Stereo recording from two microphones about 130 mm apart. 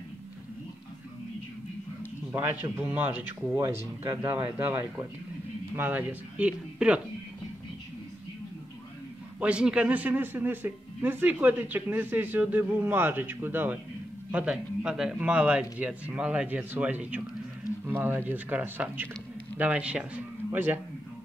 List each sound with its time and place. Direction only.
2.3 s a man's voice: 15° right (ahead or behind)
3.5 s a man's voice: 25° right (ahead or behind); by 7.0 s 10° right (ahead or behind)
9.4 s a man's voice: 10° right (ahead or behind)